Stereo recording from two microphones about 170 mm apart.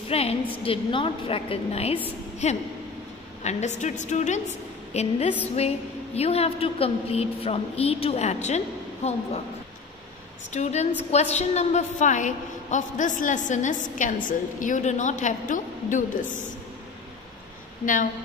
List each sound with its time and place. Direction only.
0.1 s a sound: 35° left (ahead or behind)
0.7 s a woman's voice: 30° left (ahead or behind)
10.5 s a woman's voice: 40° left (ahead or behind)